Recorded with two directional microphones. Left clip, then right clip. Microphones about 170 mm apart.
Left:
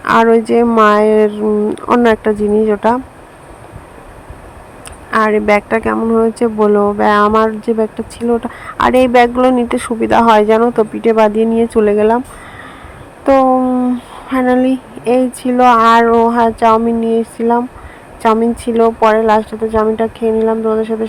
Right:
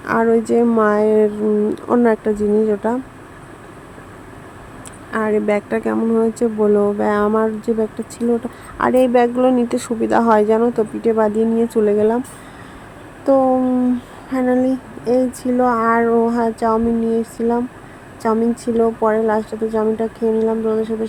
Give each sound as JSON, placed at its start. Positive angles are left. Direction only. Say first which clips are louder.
{"t": 0.0, "sound": "speech", "louder": "left 7 dB", "side_deg": 20}
{"t": 5.1, "sound": "speech", "louder": "left 7 dB", "side_deg": 15}
{"t": 13.4, "sound": "speech", "louder": "left 5 dB", "side_deg": 15}
{"t": 14.3, "sound": "speech", "louder": "left 5 dB", "side_deg": 15}
{"t": 18.9, "sound": "speech", "louder": "left 9 dB", "side_deg": 30}
{"t": 19.1, "sound": "speech", "louder": "left 6 dB", "side_deg": 20}